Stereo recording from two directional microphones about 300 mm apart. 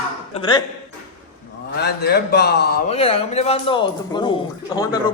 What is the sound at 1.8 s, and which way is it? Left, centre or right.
A man's voice, left.